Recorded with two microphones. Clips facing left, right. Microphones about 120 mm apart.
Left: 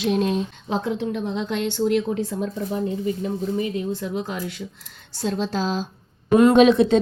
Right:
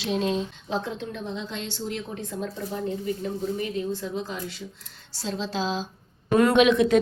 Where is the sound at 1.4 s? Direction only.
65° left (ahead or behind).